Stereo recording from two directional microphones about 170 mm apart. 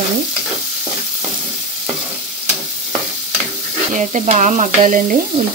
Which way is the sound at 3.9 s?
45° right (ahead or behind).